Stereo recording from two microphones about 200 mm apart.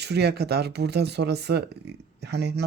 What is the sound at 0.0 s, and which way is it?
Speech, 55° right (ahead or behind).